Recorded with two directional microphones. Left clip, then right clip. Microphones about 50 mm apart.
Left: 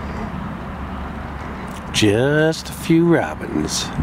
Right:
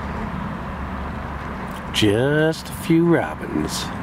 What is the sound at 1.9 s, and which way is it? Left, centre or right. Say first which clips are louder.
Speech: left 2 dB; left.